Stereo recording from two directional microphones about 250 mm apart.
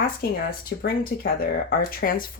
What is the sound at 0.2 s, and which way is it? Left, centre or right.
Speech, left.